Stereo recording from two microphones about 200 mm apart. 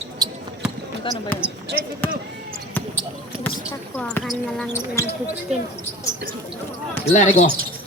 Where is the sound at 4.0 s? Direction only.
5° left (ahead or behind).